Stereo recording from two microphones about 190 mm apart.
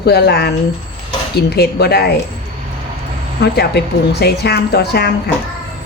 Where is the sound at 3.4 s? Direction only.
65° left (ahead or behind).